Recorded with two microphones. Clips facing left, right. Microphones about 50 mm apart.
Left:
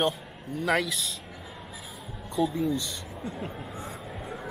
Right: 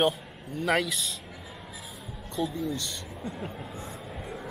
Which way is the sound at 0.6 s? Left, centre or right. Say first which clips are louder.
Even; centre.